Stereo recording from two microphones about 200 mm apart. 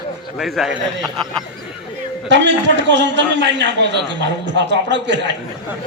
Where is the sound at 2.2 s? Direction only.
65° right (ahead or behind).